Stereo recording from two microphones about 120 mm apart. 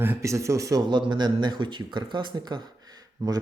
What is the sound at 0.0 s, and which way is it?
Speech, 20° right (ahead or behind).